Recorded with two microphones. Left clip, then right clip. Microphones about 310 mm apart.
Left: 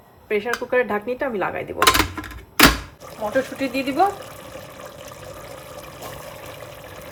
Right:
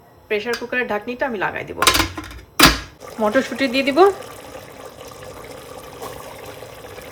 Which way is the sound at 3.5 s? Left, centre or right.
Right.